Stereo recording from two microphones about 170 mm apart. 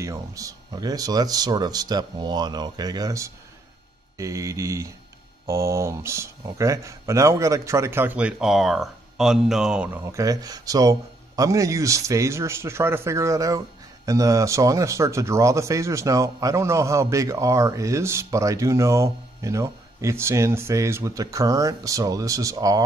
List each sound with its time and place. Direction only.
0.0 s speech: 20° right (ahead or behind)